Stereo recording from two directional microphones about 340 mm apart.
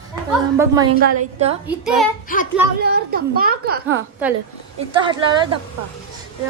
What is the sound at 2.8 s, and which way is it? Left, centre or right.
A woman's voice, right.